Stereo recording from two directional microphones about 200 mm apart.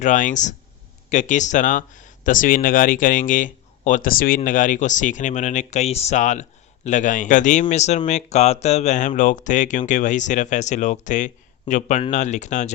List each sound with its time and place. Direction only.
0.0 s speech: 40° left (ahead or behind)